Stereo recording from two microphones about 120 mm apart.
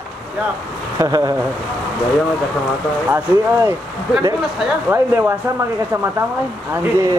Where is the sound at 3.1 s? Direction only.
20° right (ahead or behind).